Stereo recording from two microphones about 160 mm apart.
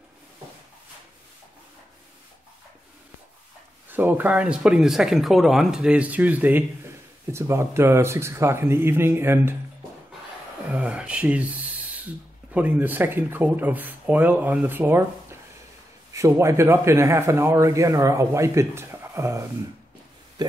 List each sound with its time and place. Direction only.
3.9 s speech: 10° right (ahead or behind)
10.7 s owl: 10° right (ahead or behind)
12.5 s speech: 10° right (ahead or behind)
16.1 s speech: 20° right (ahead or behind)